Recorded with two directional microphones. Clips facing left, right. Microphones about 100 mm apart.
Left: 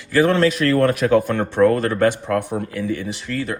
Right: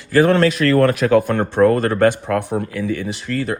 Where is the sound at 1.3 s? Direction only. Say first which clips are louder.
Right 2 dB; 40° right (ahead or behind).